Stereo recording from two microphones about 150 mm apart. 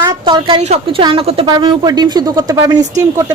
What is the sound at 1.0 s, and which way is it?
A woman's voice, 35° right (ahead or behind).